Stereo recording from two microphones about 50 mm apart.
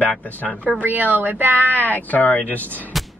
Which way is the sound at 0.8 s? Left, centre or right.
Right.